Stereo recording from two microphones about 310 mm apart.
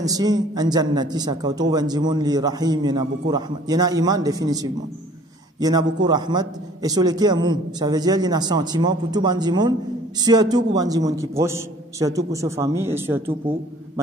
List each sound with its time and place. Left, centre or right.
0.0 s speech: centre